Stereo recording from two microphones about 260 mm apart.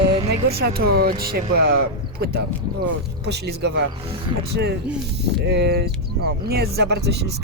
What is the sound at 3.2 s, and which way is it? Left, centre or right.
Speech, right.